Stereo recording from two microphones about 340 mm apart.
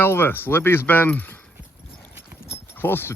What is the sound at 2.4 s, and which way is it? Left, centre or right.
Clip-clop, centre.